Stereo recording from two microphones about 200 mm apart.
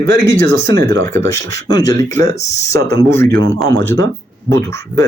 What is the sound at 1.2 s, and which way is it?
Speech, 15° left (ahead or behind).